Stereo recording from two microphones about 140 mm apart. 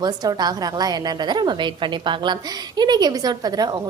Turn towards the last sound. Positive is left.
turn(degrees=-30)  # may be behind; listen again after turning